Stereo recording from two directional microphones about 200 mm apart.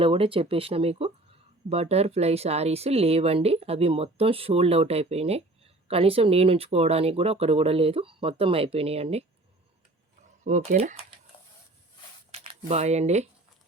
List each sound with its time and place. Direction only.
0.0 s speech: 25° right (ahead or behind)
10.4 s speech: 40° right (ahead or behind)
12.3 s speech: 30° right (ahead or behind)